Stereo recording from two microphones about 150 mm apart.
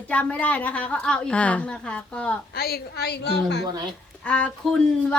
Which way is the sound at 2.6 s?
90° left.